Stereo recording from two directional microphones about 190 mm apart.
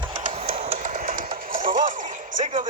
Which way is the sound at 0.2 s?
35° right (ahead or behind).